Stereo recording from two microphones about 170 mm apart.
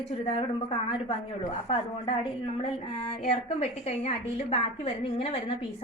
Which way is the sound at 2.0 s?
45° left (ahead or behind).